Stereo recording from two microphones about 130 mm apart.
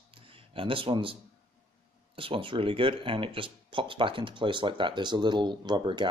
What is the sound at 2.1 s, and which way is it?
Speech, 40° right (ahead or behind).